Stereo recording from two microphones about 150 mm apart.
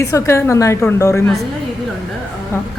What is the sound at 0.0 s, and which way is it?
A woman's voice, 20° left (ahead or behind).